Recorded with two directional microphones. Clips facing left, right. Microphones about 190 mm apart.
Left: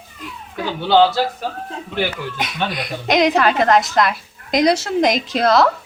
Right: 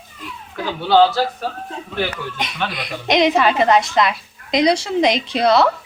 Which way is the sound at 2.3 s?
Centre (ahead or behind).